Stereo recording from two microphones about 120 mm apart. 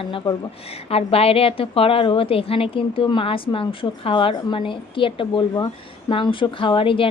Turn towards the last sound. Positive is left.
turn(degrees=45)  # may be behind; listen again after turning